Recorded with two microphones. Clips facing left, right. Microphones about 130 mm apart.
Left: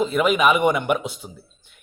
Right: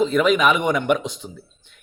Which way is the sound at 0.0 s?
5° left (ahead or behind).